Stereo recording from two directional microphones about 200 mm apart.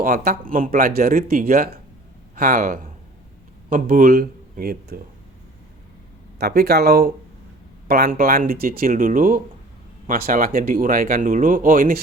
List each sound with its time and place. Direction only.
0.0 s speech: 50° right (ahead or behind)
6.4 s speech: 50° right (ahead or behind)